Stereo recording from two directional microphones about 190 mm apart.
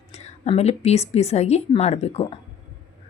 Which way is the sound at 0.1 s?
35° left (ahead or behind).